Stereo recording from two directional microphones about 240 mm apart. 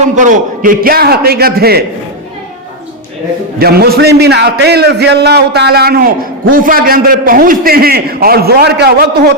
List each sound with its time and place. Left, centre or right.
0.2 s a man's voice: right
3.6 s a man's voice: right